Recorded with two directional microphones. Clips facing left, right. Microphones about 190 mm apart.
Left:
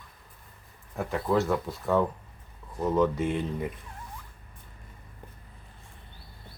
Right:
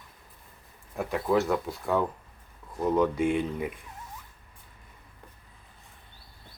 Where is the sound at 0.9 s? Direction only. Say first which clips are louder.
Right 1 dB; centre (ahead or behind).